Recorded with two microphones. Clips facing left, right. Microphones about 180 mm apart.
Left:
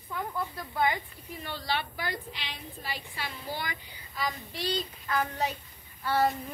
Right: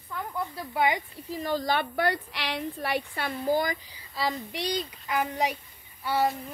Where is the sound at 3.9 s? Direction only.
30° right (ahead or behind).